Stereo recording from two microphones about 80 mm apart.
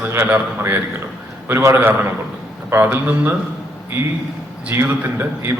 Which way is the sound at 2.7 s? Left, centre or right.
Right.